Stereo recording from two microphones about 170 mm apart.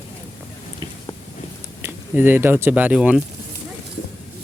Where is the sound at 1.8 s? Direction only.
10° right (ahead or behind).